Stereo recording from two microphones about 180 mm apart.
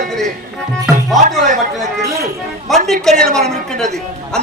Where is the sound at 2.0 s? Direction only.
15° right (ahead or behind).